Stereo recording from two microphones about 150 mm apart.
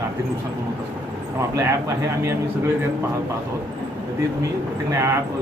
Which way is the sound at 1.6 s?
20° right (ahead or behind).